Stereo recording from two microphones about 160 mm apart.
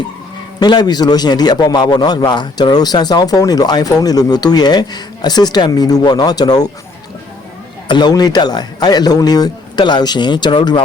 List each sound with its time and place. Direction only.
0.6 s a man's voice: 25° left (ahead or behind)
7.9 s a man's voice: 25° left (ahead or behind)